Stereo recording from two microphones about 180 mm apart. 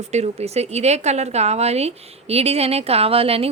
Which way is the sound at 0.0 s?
40° right (ahead or behind).